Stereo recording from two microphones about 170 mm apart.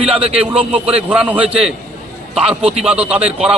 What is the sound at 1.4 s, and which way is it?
Speech, 35° right (ahead or behind).